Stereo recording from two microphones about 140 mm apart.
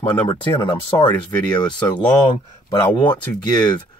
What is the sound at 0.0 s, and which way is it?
Speech, 30° left (ahead or behind).